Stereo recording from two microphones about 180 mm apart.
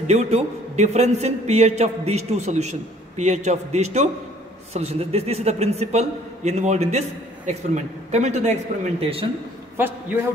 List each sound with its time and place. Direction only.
0.0 s a man's voice: 40° right (ahead or behind)
9.8 s a man's voice: 10° right (ahead or behind)